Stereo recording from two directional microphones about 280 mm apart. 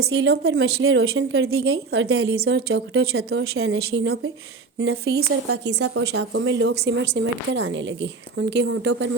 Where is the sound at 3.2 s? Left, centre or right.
Right.